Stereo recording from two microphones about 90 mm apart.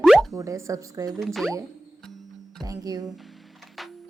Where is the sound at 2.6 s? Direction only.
40° right (ahead or behind).